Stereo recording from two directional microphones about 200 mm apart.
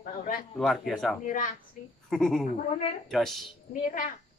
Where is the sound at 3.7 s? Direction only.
40° left (ahead or behind).